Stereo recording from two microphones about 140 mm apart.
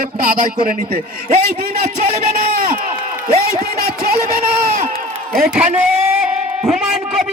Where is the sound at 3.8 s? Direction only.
90° right.